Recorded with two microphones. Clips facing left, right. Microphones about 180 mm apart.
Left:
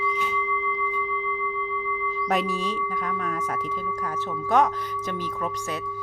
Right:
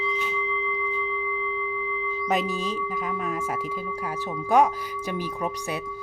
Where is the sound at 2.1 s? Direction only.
Centre (ahead or behind).